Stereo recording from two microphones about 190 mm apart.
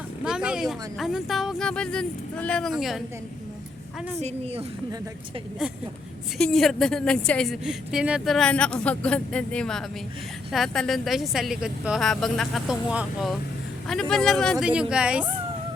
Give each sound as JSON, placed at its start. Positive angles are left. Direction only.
{"t": 0.3, "sound": "a woman's voice", "side_deg": -5}
{"t": 4.2, "sound": "a woman's voice", "side_deg": -35}
{"t": 6.3, "sound": "a woman's voice", "side_deg": 0}